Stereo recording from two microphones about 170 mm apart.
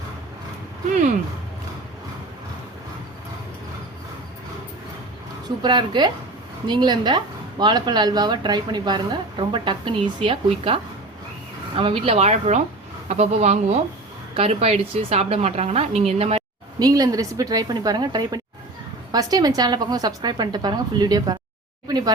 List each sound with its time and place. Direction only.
5.6 s a woman's voice: 25° right (ahead or behind)
11.8 s a woman's voice: 30° right (ahead or behind)
16.8 s a woman's voice: 20° right (ahead or behind)